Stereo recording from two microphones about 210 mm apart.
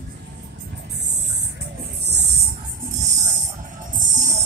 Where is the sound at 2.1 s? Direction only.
55° right (ahead or behind).